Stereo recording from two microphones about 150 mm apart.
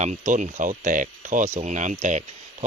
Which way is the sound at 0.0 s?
55° right (ahead or behind).